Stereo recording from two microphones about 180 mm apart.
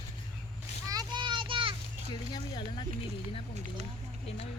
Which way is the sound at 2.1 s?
25° left (ahead or behind).